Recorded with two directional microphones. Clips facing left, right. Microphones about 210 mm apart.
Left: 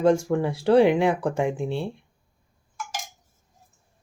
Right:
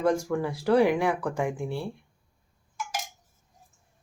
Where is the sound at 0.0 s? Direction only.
25° left (ahead or behind).